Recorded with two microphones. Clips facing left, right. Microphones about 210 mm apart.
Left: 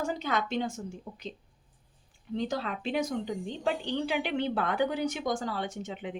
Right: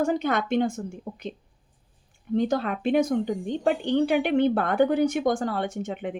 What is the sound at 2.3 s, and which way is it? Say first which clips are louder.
A woman's voice: right 8 dB; 55° right (ahead or behind).